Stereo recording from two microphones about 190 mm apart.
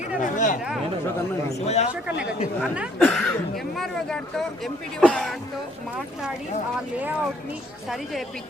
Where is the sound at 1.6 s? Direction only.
35° left (ahead or behind).